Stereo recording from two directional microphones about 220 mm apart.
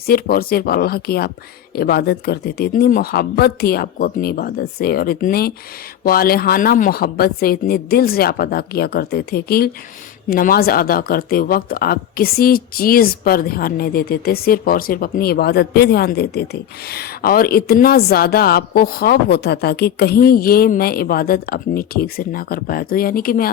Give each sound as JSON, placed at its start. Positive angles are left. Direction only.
{"t": 0.1, "sound": "speech", "side_deg": 45}